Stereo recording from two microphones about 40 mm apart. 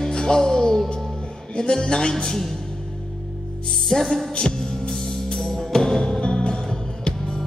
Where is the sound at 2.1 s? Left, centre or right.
Centre.